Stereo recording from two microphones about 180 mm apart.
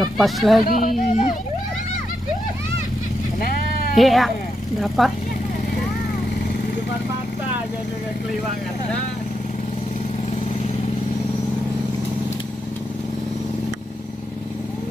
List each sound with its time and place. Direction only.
0.2 s speech: centre (ahead or behind)
0.7 s speech: 45° left (ahead or behind)
1.0 s children playing: 45° left (ahead or behind)
3.9 s speech: centre (ahead or behind)